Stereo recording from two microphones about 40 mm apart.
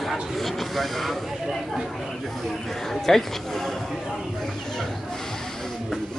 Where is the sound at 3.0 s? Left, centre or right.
Centre.